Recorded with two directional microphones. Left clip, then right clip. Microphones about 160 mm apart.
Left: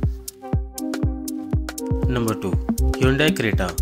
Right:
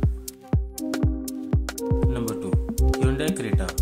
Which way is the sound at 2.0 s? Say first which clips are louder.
Left 4 dB; 25° left (ahead or behind).